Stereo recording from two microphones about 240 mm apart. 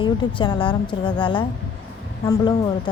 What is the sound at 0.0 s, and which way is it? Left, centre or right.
A woman's voice, centre.